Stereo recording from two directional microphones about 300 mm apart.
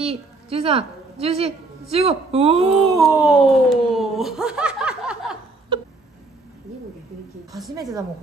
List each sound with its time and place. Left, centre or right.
0.0 s a woman's voice: centre
2.7 s speech: centre